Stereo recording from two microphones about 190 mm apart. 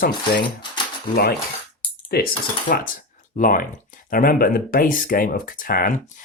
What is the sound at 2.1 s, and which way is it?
Speech, 55° left (ahead or behind).